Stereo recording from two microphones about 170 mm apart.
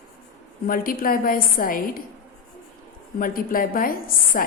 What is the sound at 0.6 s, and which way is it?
A woman's voice, 55° left (ahead or behind).